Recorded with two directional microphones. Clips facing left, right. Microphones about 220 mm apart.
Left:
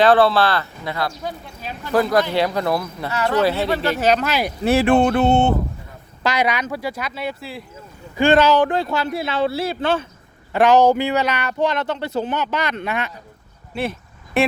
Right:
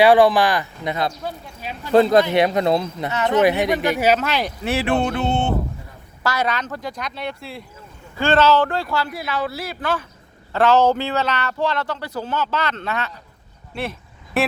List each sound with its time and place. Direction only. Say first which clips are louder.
0.0 s speech: right 1 dB; 15° right (ahead or behind)
1.9 s speech: right 4 dB; 25° right (ahead or behind); by 4.5 s 5° left (ahead or behind)
4.6 s speech: left 6 dB; 45° left (ahead or behind)
6.2 s speech: left 2 dB; 15° left (ahead or behind)
8.1 s speech: left 2 dB; 15° left (ahead or behind)
10.5 s speech: left 2 dB; 15° left (ahead or behind)
13.7 s speech: left 3 dB; centre (ahead or behind)